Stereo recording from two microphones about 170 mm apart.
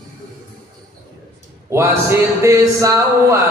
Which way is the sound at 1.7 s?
15° right (ahead or behind).